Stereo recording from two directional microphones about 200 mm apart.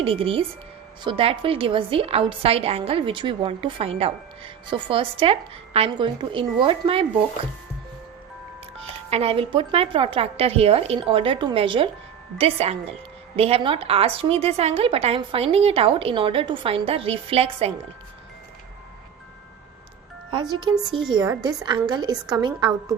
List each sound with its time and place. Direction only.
0.0 s a woman's voice: 25° right (ahead or behind)
9.0 s a woman's voice: 30° right (ahead or behind)
20.7 s a woman's voice: 15° right (ahead or behind)